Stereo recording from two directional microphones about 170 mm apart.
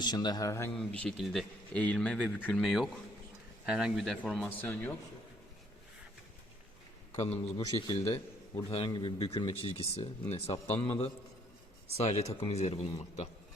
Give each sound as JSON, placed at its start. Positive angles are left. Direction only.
{"t": 0.0, "sound": "speech", "side_deg": 25}
{"t": 0.8, "sound": "speech", "side_deg": 5}
{"t": 7.1, "sound": "a man's voice", "side_deg": 40}
{"t": 8.7, "sound": "speech", "side_deg": 30}